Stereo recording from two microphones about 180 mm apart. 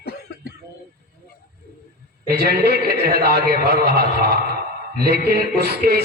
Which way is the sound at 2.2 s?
60° right (ahead or behind).